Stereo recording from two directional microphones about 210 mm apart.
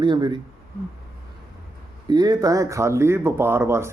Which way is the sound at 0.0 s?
20° right (ahead or behind).